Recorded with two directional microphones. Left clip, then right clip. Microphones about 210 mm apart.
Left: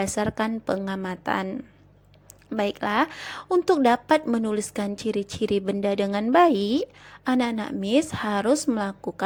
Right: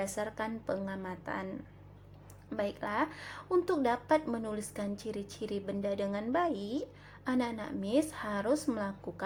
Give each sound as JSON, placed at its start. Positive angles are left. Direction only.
{"t": 0.0, "sound": "a woman's voice", "side_deg": 30}